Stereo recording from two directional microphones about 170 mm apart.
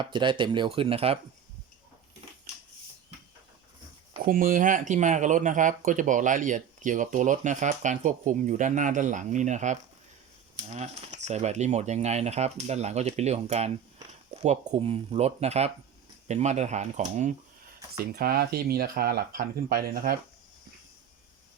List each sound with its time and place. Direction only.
0.0 s speech: 30° right (ahead or behind)
4.3 s speech: 55° right (ahead or behind)
17.9 s speech: 65° right (ahead or behind)